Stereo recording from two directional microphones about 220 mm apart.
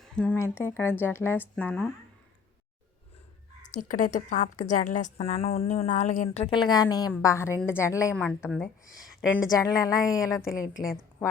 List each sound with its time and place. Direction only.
0.0 s speech: 5° left (ahead or behind)
3.7 s a woman's voice: 35° left (ahead or behind); by 9.5 s centre (ahead or behind)
9.5 s speech: 15° left (ahead or behind)